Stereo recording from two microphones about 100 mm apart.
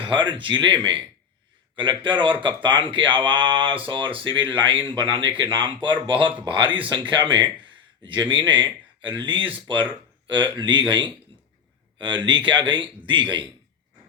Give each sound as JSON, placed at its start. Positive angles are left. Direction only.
{"t": 0.0, "sound": "speech", "side_deg": -55}